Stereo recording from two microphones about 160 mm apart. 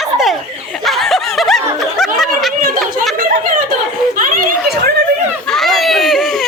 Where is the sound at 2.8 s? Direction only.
Centre (ahead or behind).